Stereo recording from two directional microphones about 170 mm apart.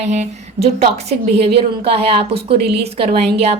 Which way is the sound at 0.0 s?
40° right (ahead or behind).